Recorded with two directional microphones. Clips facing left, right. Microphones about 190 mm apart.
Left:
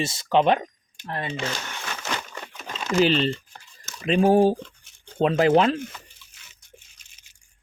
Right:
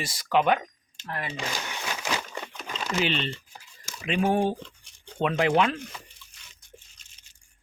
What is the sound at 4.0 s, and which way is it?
Speech, 35° left (ahead or behind).